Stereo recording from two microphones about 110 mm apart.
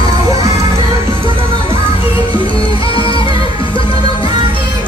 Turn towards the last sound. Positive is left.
turn(degrees=50)  # may be behind; listen again after turning